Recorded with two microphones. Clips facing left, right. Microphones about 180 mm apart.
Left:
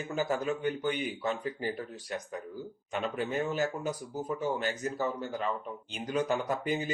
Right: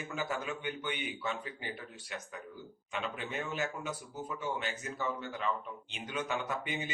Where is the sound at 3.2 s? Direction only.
40° left (ahead or behind).